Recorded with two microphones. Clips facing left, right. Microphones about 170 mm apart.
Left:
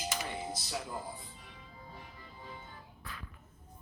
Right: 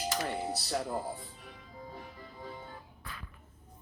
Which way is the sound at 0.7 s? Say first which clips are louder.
Right 8 dB; 45° right (ahead or behind).